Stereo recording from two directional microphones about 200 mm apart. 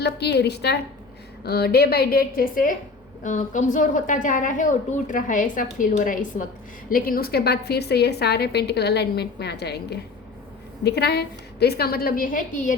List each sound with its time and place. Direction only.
0.0 s a woman's voice: 55° left (ahead or behind); by 12.7 s 40° left (ahead or behind)